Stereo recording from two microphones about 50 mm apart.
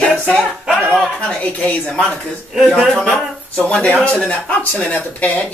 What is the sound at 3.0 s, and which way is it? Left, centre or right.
Speech, centre.